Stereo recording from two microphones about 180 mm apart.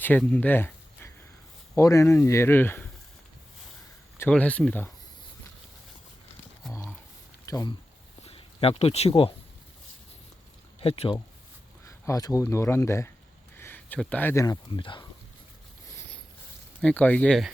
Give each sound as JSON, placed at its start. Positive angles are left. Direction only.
{"t": 0.0, "sound": "a sound", "side_deg": 10}
{"t": 1.7, "sound": "speech", "side_deg": 15}
{"t": 4.2, "sound": "speech", "side_deg": 10}
{"t": 7.4, "sound": "a sound", "side_deg": 15}
{"t": 8.2, "sound": "speech", "side_deg": 35}
{"t": 10.8, "sound": "speech", "side_deg": 30}
{"t": 11.9, "sound": "speech", "side_deg": 15}
{"t": 16.8, "sound": "speech", "side_deg": 10}